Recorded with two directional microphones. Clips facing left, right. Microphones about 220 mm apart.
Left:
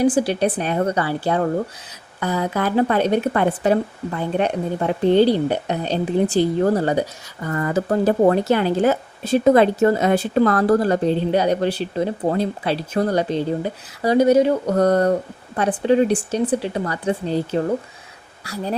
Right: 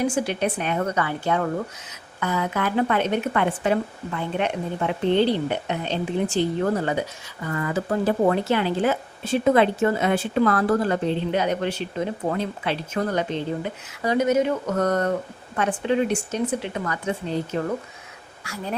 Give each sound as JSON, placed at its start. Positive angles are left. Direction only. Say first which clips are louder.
{"t": 0.0, "sound": "speech", "louder": "left 6 dB", "side_deg": 35}